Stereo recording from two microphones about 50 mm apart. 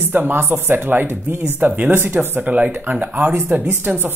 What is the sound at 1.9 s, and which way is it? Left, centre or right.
Speech, right.